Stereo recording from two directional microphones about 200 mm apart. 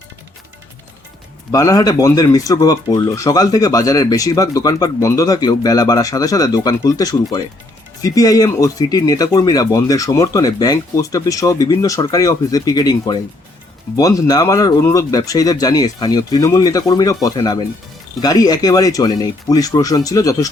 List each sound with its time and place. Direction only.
1.5 s speech: 15° left (ahead or behind)